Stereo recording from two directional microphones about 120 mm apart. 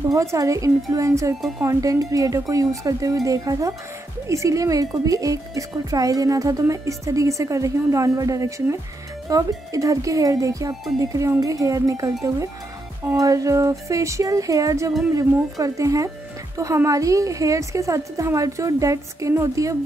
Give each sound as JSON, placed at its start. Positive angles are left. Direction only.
{"t": 0.1, "sound": "speech", "side_deg": -30}